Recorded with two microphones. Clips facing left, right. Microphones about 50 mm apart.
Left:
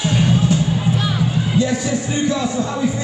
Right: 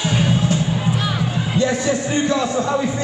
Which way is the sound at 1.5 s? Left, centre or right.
Right.